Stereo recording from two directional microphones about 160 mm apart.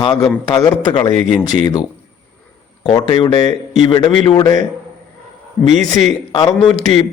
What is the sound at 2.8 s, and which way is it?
Speech, 30° left (ahead or behind).